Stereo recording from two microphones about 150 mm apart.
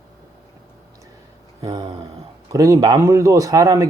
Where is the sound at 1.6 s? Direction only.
30° right (ahead or behind).